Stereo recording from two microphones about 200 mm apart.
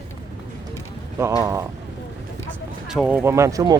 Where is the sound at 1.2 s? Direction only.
15° right (ahead or behind).